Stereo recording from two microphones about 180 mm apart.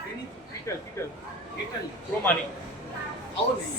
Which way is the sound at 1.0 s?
15° left (ahead or behind).